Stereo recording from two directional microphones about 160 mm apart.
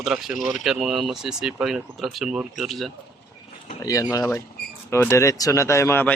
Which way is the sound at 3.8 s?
20° left (ahead or behind).